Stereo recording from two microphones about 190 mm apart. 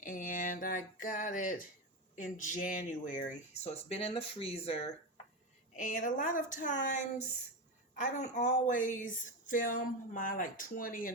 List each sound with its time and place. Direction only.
0.0 s speech: 45° left (ahead or behind)
5.7 s speech: 40° left (ahead or behind)